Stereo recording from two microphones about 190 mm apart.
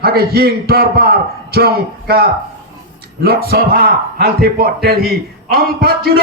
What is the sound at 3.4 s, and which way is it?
A man's voice, 50° right (ahead or behind).